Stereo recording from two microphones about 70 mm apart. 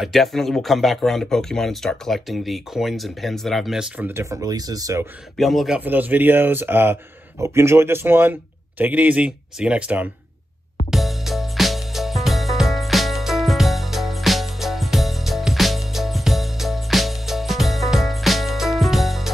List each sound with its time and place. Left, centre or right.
0.0 s speech: centre
4.1 s speech: right
4.5 s speech: right
5.4 s speech: centre
5.8 s a man's voice: right
10.9 s music: centre